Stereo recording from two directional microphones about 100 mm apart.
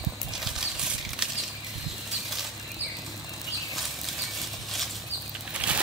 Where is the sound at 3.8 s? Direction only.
Centre (ahead or behind).